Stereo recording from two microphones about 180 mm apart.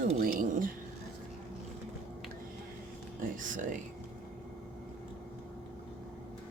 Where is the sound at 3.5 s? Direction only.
45° right (ahead or behind).